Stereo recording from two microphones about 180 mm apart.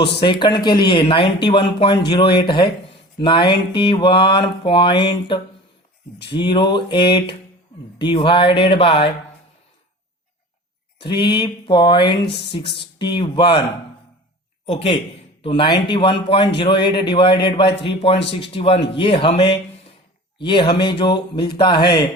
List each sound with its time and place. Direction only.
0.1 s speech: 25° left (ahead or behind)
11.0 s speech: 25° left (ahead or behind)
14.7 s a man's voice: 30° left (ahead or behind)